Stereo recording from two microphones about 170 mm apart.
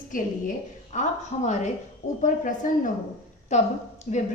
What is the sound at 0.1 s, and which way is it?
A woman's voice, 50° left (ahead or behind).